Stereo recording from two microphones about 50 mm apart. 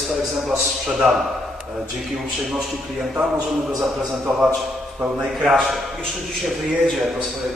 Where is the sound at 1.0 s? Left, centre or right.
Centre.